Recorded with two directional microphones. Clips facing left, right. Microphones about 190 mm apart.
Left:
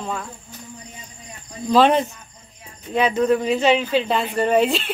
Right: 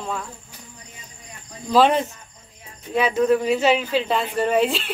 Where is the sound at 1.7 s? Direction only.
5° right (ahead or behind).